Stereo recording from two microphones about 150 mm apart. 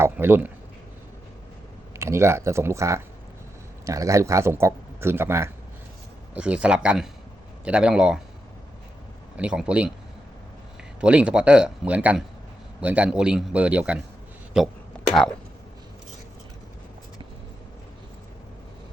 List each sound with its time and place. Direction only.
0.0 s speech: 15° right (ahead or behind)
2.0 s speech: 20° right (ahead or behind)
9.4 s speech: 5° right (ahead or behind)
11.0 s speech: 5° right (ahead or behind)
14.9 s whispering: 10° left (ahead or behind)